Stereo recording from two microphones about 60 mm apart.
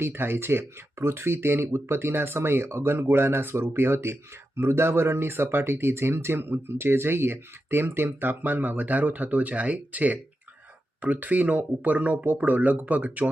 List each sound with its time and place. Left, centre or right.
0.0 s speech: right